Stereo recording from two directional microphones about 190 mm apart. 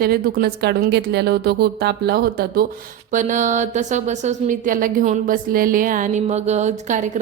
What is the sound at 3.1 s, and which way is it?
A woman's voice, 40° right (ahead or behind).